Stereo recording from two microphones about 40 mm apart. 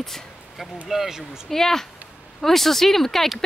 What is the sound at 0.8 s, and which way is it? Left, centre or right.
Speech, centre.